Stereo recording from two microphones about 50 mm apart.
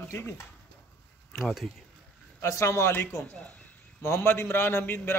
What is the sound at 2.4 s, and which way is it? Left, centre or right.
Speech, left.